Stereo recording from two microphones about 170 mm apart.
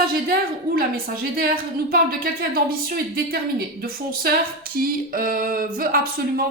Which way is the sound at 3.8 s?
60° right (ahead or behind).